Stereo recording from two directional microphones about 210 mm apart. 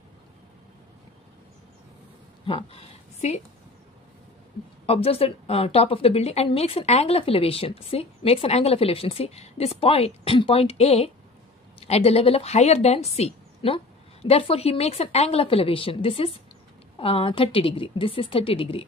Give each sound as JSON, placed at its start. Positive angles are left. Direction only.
{"t": 2.4, "sound": "speech", "side_deg": 25}
{"t": 4.8, "sound": "a woman's voice", "side_deg": 25}